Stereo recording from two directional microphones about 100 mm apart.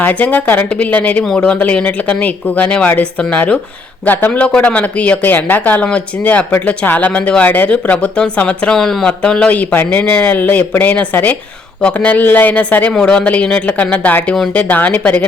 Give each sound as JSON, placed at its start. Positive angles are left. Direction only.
{"t": 0.0, "sound": "speech", "side_deg": 15}
{"t": 14.3, "sound": "speech", "side_deg": 5}
{"t": 14.6, "sound": "speech", "side_deg": 15}